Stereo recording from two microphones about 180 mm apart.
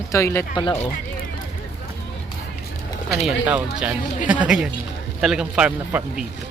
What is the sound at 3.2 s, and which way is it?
A man's voice, 5° right (ahead or behind).